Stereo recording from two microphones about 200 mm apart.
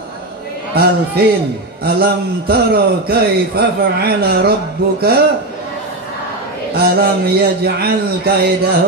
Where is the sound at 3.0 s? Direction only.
50° right (ahead or behind).